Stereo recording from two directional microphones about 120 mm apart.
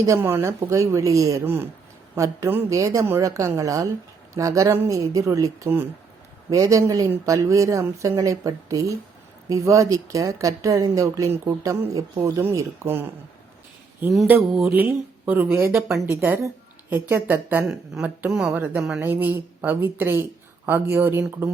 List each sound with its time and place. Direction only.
0.0 s a woman's voice: 25° right (ahead or behind)
14.3 s speech: 5° right (ahead or behind)
15.7 s speech: centre (ahead or behind)
16.0 s a woman's voice: 20° right (ahead or behind)